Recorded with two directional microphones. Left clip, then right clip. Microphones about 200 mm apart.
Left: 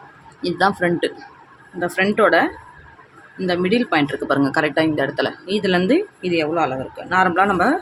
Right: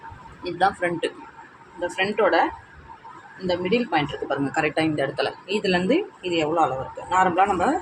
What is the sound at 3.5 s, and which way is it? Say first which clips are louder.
Speech: left 4 dB; 45° left (ahead or behind).